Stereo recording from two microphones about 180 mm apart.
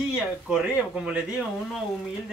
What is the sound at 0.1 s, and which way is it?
Speech, 5° right (ahead or behind).